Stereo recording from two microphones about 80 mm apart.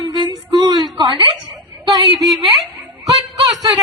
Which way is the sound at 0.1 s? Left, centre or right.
Right.